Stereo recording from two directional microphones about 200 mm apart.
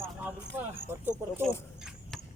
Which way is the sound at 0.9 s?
10° right (ahead or behind).